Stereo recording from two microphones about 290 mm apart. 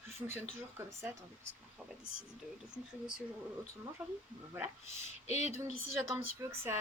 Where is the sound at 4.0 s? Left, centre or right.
Centre.